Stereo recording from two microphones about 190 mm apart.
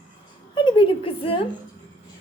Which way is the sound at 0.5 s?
25° left (ahead or behind).